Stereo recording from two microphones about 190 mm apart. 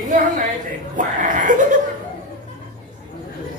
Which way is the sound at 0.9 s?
40° right (ahead or behind).